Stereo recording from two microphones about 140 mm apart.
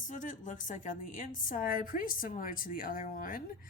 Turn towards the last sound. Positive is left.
turn(degrees=80)